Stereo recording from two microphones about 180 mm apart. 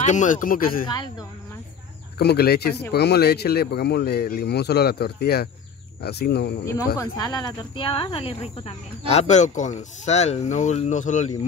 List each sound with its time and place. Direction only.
0.0 s speech: 45° left (ahead or behind)
2.1 s speech: 60° left (ahead or behind)
7.0 s speech: 20° left (ahead or behind); by 11.3 s 45° left (ahead or behind)